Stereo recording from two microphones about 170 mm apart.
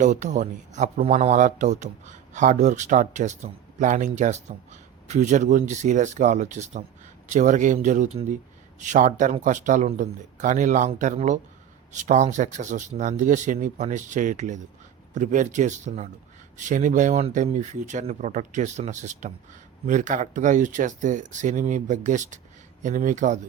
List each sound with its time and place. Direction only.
0.0 s speech: 45° right (ahead or behind)